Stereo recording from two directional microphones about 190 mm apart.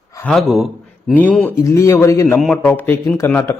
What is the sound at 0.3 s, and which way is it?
A man's voice, centre (ahead or behind).